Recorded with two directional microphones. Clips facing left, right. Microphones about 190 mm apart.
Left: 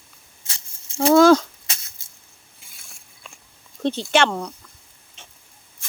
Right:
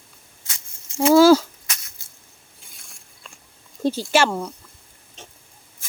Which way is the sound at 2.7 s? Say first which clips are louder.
Right 1 dB; centre (ahead or behind).